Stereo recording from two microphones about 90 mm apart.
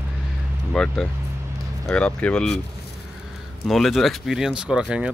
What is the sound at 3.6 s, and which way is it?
Speech, centre (ahead or behind).